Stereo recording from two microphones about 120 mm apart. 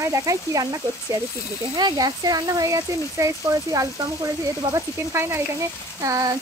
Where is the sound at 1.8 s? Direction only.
35° right (ahead or behind).